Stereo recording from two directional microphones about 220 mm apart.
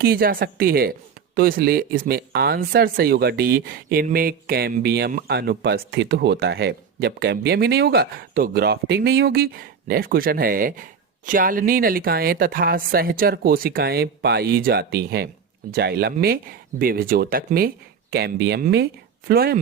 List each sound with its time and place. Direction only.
0.0 s speech: 45° right (ahead or behind)